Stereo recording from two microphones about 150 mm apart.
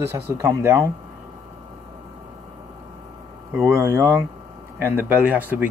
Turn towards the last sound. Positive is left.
turn(degrees=-10)  # may be behind; listen again after turning